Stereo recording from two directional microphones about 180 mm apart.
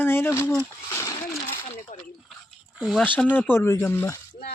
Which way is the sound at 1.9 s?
45° left (ahead or behind).